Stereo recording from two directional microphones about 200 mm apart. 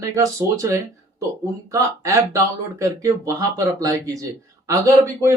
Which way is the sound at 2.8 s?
15° right (ahead or behind).